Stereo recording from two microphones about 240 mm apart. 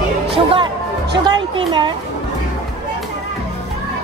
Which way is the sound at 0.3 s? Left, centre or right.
Right.